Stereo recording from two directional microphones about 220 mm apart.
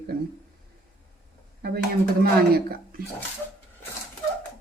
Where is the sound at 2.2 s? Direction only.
45° right (ahead or behind).